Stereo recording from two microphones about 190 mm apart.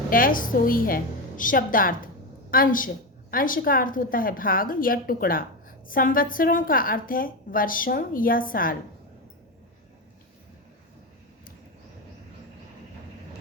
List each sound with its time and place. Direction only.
0.1 s a woman's voice: 45° left (ahead or behind)